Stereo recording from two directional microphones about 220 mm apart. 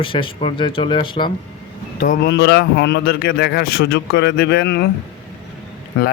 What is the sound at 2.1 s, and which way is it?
A man's voice, 45° left (ahead or behind).